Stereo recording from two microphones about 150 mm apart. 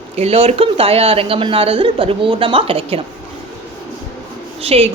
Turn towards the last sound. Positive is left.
turn(degrees=-40)  # may be behind; listen again after turning